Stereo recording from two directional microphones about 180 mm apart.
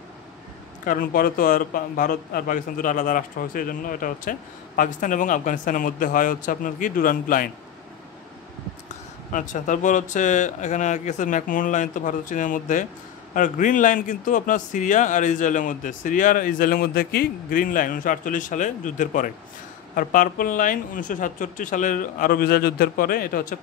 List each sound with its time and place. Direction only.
0.8 s a man's voice: 50° left (ahead or behind)
9.3 s a man's voice: 45° left (ahead or behind)